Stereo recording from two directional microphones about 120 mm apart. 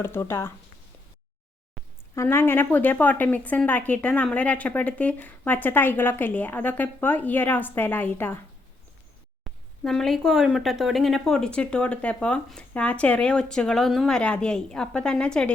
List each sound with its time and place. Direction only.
0.0 s speech: 20° left (ahead or behind)
2.1 s a woman's voice: 20° left (ahead or behind)
9.4 s a woman's voice: 5° left (ahead or behind)